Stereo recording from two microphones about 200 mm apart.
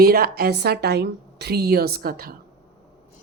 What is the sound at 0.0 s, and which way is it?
Speech, 50° right (ahead or behind).